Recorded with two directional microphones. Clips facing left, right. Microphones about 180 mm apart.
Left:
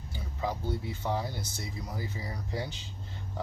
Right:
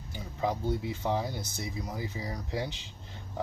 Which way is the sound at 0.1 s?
20° right (ahead or behind).